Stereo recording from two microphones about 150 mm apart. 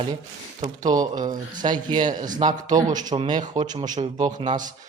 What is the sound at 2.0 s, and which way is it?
Speech, 60° right (ahead or behind).